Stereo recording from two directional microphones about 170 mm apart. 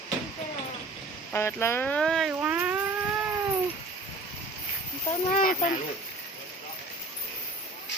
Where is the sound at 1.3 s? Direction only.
15° left (ahead or behind); by 2.8 s 10° right (ahead or behind).